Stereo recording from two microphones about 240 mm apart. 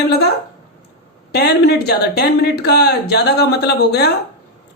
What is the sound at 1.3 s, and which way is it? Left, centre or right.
Speech, left.